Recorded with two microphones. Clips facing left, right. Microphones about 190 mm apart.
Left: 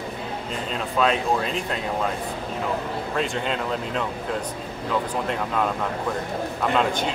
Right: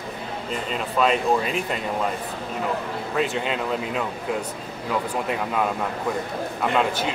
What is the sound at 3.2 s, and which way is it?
Speech, 5° right (ahead or behind).